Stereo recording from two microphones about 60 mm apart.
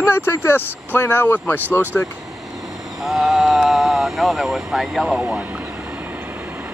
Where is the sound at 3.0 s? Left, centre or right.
Centre.